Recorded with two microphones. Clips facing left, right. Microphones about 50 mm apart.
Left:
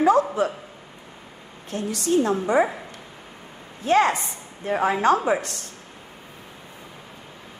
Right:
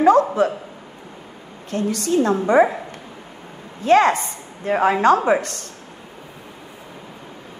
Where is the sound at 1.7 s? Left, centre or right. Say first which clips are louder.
Right 3 dB; right.